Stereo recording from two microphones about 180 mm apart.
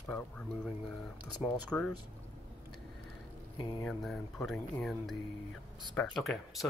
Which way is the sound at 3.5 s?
25° left (ahead or behind).